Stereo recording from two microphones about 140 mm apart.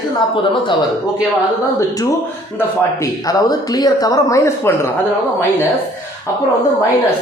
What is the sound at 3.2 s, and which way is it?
Speech, 25° left (ahead or behind).